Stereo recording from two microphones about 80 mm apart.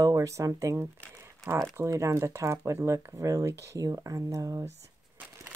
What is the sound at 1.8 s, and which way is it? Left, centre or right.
Speech, right.